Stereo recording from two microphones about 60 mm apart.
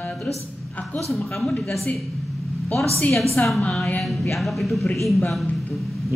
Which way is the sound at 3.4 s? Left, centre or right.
Left.